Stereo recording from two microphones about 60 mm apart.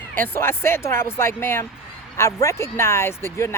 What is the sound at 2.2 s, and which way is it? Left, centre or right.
Speech, left.